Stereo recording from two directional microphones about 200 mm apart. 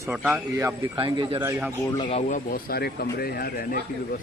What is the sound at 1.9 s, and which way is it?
A man's voice, 25° left (ahead or behind).